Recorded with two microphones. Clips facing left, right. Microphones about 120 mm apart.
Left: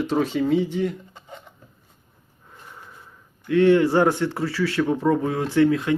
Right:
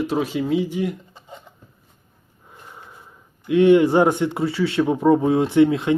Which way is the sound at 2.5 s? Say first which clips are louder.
Right 1 dB; 15° right (ahead or behind).